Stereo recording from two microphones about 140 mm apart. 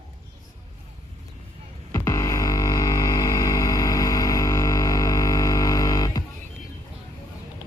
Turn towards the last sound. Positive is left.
turn(degrees=25)  # may be behind; listen again after turning